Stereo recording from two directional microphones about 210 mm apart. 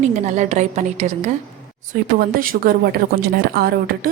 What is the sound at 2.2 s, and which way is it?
A woman's voice, 45° right (ahead or behind).